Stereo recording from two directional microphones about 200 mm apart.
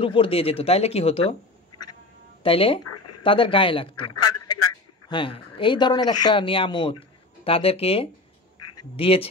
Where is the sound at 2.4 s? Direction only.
25° left (ahead or behind).